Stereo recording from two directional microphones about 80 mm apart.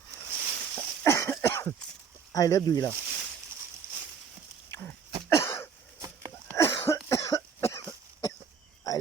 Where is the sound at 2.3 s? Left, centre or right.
Left.